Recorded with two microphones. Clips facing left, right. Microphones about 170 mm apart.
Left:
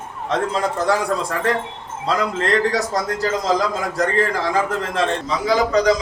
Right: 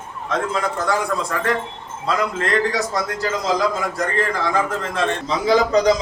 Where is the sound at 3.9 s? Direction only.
35° left (ahead or behind).